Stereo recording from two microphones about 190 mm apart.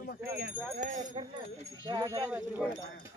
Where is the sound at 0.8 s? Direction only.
40° right (ahead or behind).